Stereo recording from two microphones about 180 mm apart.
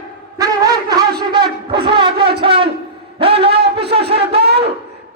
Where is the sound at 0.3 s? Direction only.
20° right (ahead or behind).